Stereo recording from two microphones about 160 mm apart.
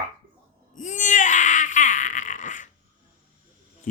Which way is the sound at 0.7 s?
50° left (ahead or behind).